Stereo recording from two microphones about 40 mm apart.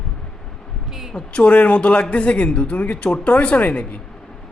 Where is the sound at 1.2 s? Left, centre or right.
Left.